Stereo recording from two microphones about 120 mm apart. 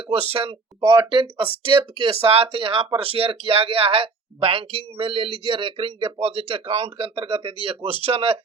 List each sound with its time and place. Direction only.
0.1 s speech: 55° right (ahead or behind)